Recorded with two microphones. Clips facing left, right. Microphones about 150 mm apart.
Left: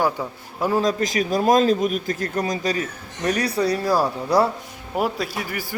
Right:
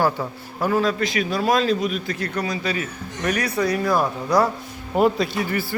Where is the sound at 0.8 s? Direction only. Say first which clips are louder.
Left 2 dB; 40° left (ahead or behind).